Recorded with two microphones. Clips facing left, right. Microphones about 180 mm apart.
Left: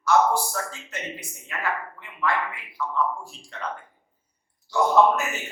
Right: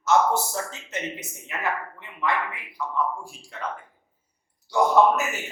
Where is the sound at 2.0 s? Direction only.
20° right (ahead or behind).